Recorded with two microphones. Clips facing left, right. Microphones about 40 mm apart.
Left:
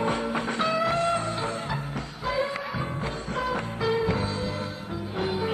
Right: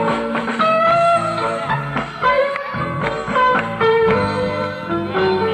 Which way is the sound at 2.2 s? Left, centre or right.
Right.